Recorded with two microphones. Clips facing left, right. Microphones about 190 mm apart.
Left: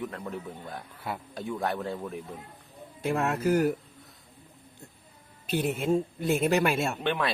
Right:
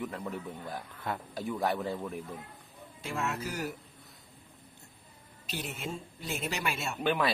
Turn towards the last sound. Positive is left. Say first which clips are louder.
# even
turn(degrees=0)  # may be behind; listen again after turning